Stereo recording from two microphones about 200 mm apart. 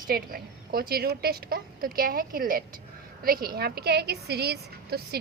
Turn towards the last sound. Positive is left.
turn(degrees=-55)  # may be behind; listen again after turning